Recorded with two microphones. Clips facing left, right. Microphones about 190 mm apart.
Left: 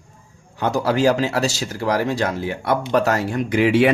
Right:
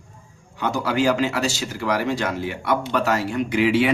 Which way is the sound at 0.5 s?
40° left (ahead or behind).